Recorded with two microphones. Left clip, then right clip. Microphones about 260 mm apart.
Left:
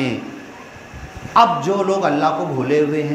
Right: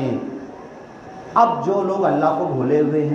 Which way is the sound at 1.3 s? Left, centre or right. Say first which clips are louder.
Left 2 dB; left.